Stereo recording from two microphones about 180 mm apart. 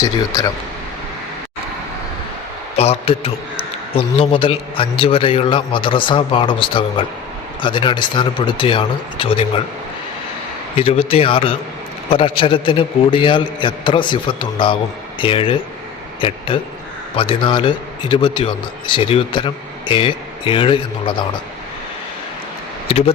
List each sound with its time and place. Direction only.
2.7 s a man's voice: 35° left (ahead or behind)
10.8 s a man's voice: 30° left (ahead or behind)
22.9 s a man's voice: 35° left (ahead or behind)